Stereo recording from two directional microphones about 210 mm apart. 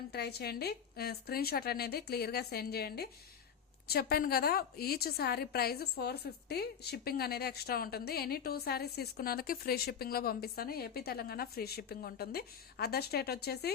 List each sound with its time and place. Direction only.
0.1 s a woman's voice: 50° left (ahead or behind)